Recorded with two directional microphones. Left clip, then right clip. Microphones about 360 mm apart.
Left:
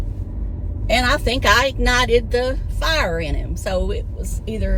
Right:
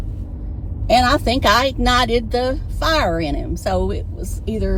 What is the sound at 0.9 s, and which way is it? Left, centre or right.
Speech, centre.